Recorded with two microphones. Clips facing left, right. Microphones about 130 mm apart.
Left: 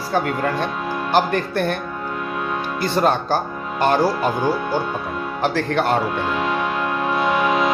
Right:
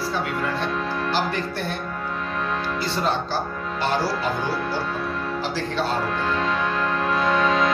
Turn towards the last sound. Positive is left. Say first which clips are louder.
# left 2 dB
turn(degrees=15)  # may be behind; listen again after turning